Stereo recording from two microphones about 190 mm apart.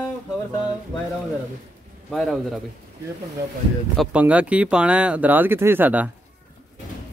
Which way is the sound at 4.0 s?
5° right (ahead or behind).